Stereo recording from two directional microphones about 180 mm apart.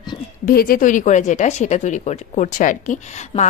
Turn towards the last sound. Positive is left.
turn(degrees=45)  # may be behind; listen again after turning